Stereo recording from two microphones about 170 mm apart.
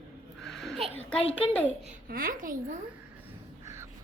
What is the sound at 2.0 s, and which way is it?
Speech, 55° right (ahead or behind).